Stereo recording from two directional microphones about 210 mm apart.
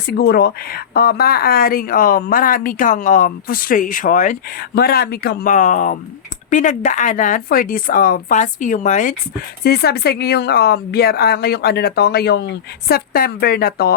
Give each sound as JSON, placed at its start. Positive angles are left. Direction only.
{"t": 0.0, "sound": "speech", "side_deg": 50}